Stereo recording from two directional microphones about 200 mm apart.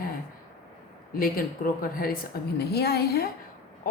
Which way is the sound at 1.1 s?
45° left (ahead or behind).